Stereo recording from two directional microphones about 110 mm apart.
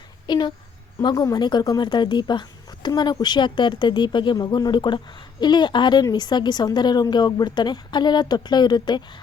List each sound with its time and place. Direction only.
0.3 s a woman's voice: 40° left (ahead or behind)